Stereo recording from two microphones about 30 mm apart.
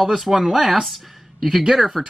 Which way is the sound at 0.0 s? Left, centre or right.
Centre.